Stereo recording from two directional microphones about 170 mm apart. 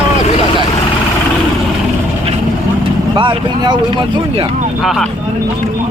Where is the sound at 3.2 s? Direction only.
25° right (ahead or behind).